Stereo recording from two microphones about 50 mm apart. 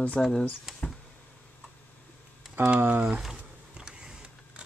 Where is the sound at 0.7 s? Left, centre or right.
Centre.